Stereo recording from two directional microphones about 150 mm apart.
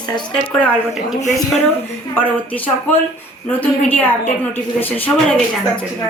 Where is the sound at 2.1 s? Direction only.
10° left (ahead or behind).